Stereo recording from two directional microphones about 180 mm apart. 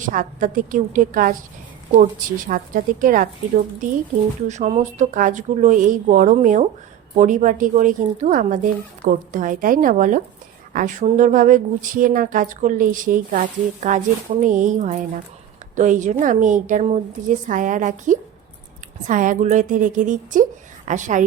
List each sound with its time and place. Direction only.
0.0 s speech: 45° right (ahead or behind)
4.4 s speech: 40° right (ahead or behind)